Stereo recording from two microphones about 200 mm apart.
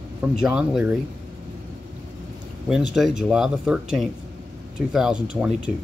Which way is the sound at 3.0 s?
5° right (ahead or behind).